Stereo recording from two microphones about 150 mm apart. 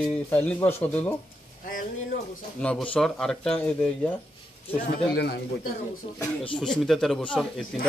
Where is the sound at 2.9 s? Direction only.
5° left (ahead or behind).